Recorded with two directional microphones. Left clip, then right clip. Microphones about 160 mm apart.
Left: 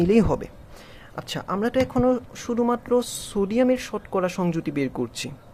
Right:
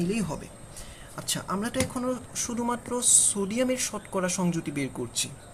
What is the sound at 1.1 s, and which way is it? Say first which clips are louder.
Speech: left 3 dB; 45° left (ahead or behind).